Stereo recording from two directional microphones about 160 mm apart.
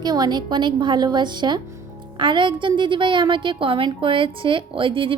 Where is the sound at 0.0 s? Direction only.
25° right (ahead or behind).